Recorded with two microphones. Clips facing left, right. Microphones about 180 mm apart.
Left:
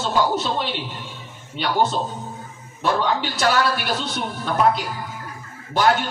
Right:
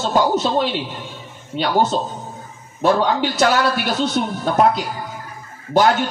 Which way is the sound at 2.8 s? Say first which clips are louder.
Right 5 dB; 45° right (ahead or behind).